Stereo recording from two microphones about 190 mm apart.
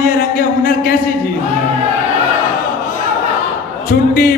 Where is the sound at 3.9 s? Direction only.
45° left (ahead or behind).